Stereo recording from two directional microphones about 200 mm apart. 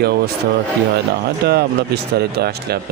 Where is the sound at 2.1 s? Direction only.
50° right (ahead or behind).